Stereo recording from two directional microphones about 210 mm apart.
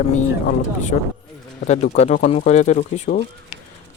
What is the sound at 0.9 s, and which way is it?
Speech, 35° left (ahead or behind).